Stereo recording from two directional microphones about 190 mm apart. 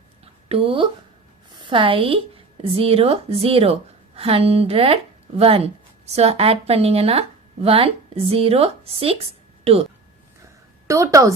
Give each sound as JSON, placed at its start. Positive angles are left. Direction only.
{"t": 0.4, "sound": "a woman's voice", "side_deg": -30}
{"t": 10.8, "sound": "a woman's voice", "side_deg": -15}